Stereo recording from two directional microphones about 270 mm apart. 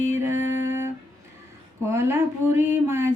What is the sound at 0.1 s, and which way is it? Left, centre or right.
Music, centre.